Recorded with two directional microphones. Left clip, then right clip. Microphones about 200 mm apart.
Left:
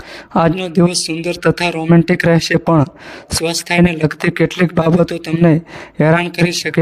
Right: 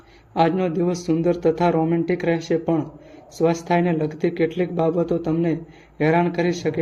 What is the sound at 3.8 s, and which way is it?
A man's voice, 50° left (ahead or behind).